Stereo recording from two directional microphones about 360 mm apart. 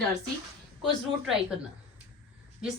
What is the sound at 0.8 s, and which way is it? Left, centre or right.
Speech, centre.